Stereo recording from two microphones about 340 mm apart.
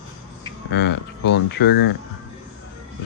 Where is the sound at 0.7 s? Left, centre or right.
Left.